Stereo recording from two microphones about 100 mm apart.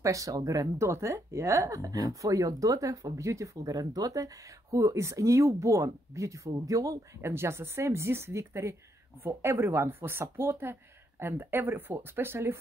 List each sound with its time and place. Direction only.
0.0 s speech: 35° right (ahead or behind)